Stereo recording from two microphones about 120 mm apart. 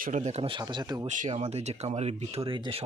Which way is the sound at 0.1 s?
80° right.